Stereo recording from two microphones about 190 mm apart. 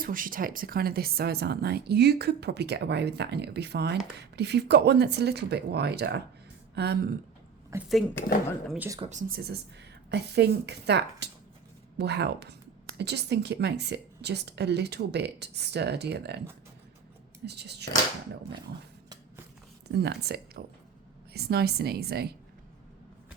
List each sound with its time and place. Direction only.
0.0 s speech: 45° right (ahead or behind)
7.7 s speech: 15° right (ahead or behind)
8.2 s speech: 10° left (ahead or behind)
8.6 s speech: centre (ahead or behind)
9.0 s speech: 40° right (ahead or behind); by 16.4 s 60° right (ahead or behind)
17.4 s speech: 60° right (ahead or behind)
19.9 s speech: 60° right (ahead or behind)